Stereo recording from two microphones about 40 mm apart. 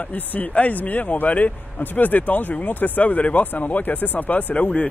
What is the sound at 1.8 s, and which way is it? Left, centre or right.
A man's voice, left.